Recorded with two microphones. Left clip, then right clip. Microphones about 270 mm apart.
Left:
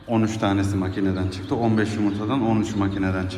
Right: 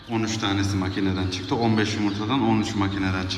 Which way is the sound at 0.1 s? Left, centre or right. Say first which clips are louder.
Left 3 dB; centre.